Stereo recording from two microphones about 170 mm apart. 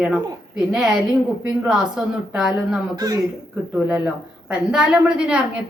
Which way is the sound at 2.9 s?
20° right (ahead or behind).